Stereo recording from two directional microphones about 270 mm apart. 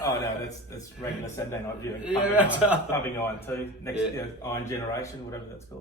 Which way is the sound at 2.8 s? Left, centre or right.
Centre.